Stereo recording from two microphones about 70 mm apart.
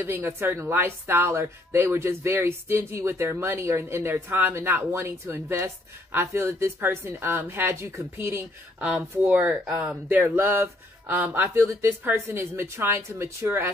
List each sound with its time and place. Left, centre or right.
0.0 s speech: right
11.4 s speech: right